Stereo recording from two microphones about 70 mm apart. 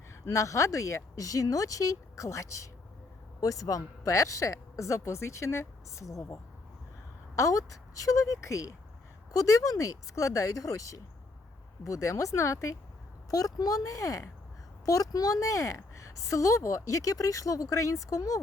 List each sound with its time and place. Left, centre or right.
0.3 s speech: left
7.3 s speech: left
13.3 s speech: left
14.8 s speech: left